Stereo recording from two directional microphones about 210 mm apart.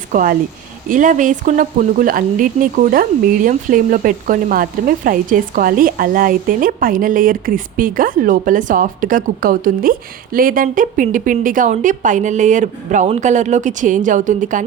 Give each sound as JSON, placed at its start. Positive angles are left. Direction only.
{"t": 0.1, "sound": "speech", "side_deg": -40}